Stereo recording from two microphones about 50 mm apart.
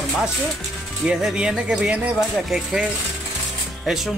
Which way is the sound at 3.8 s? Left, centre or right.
Centre.